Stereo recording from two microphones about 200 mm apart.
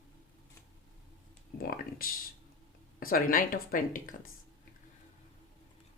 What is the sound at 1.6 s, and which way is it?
Speech, 45° left (ahead or behind).